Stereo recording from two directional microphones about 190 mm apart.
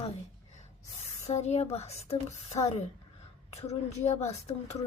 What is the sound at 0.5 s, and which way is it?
Speech, 35° left (ahead or behind).